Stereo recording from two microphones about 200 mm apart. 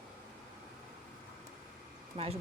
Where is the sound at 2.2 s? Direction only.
30° right (ahead or behind).